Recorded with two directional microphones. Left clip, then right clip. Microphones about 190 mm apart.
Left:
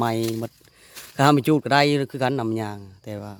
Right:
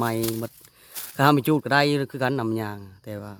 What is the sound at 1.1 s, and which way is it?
Speech, 5° left (ahead or behind).